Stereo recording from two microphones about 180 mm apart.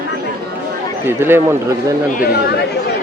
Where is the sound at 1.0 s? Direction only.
10° right (ahead or behind).